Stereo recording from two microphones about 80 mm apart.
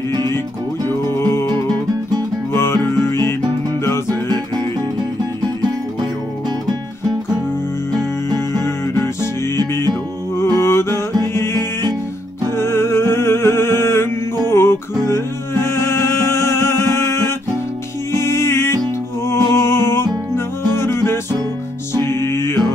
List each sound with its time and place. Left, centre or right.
0.8 s music: left
8.3 s music: left
10.3 s music: left